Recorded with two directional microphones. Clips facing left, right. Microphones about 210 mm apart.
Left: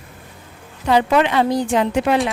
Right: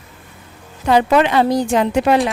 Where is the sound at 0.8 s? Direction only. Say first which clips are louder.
Right 2 dB; 45° right (ahead or behind).